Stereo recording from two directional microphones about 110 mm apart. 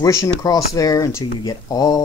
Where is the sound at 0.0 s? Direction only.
30° left (ahead or behind).